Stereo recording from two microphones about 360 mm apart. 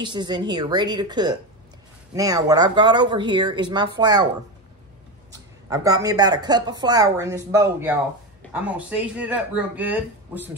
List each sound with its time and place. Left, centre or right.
0.0 s speech: centre
5.7 s speech: centre